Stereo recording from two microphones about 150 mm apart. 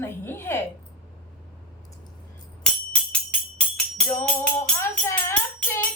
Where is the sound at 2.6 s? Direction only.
5° left (ahead or behind).